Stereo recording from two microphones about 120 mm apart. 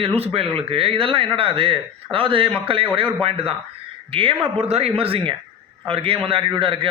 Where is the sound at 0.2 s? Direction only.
50° right (ahead or behind).